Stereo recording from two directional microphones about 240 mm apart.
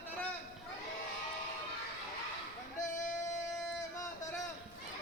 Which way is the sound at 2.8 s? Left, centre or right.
Left.